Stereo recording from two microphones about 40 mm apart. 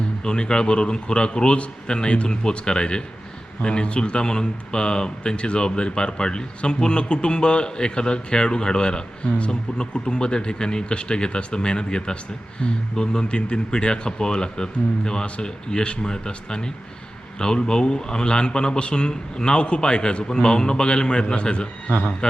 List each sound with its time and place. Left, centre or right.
0.2 s speech: left
21.8 s a man's voice: left